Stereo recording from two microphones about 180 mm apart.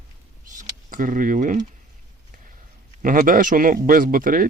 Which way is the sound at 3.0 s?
50° right (ahead or behind).